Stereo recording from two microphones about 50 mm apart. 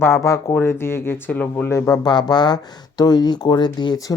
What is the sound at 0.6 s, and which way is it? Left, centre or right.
Speech, left.